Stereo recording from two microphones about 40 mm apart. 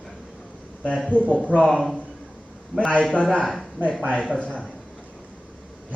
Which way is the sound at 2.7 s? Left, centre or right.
Right.